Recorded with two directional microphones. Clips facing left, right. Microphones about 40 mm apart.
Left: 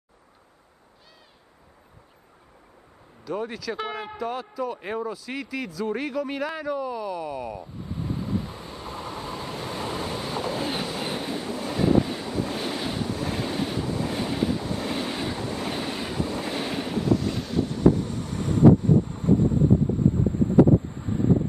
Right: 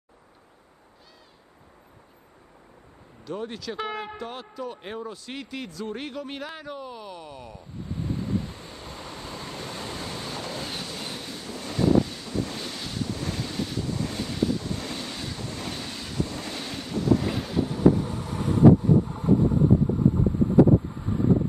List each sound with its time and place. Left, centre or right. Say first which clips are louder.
3.3 s speech: left 3 dB; centre
7.2 s vehicle: left 9 dB; centre; by 11.5 s left
11.5 s wind noise: even; centre
12.4 s waves: left 1 dB; centre
17.2 s boat: even; centre
20.2 s wind noise: left 1 dB; centre